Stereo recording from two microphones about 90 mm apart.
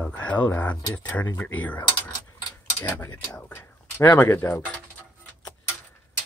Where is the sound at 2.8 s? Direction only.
30° left (ahead or behind).